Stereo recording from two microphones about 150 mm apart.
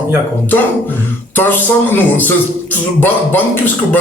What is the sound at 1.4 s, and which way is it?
A man's voice, 15° left (ahead or behind).